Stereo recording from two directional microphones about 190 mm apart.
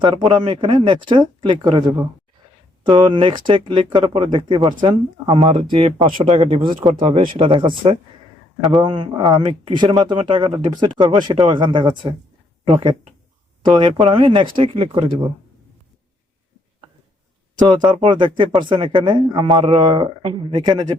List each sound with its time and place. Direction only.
0.0 s speech: 25° right (ahead or behind)
17.8 s speech: 25° right (ahead or behind)